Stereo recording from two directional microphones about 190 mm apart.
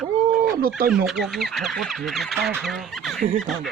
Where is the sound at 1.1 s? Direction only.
Centre (ahead or behind).